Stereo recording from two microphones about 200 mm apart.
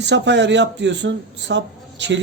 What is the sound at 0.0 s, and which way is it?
Speech, 60° right (ahead or behind).